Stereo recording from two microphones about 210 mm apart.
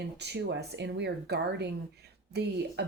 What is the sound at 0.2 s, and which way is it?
Speech, 55° right (ahead or behind).